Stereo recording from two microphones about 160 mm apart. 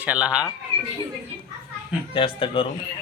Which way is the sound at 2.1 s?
30° left (ahead or behind).